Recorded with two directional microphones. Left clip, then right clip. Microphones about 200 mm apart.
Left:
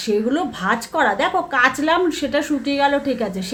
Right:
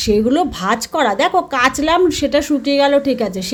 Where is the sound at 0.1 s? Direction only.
40° right (ahead or behind).